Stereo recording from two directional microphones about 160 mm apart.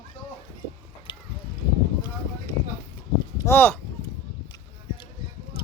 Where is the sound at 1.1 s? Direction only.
30° left (ahead or behind).